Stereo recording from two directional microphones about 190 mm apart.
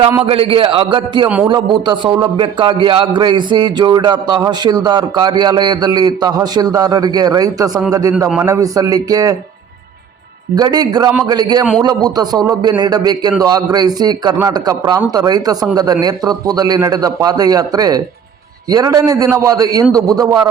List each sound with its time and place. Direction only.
0.3 s a man's voice: 30° right (ahead or behind)
10.5 s a man's voice: 20° right (ahead or behind)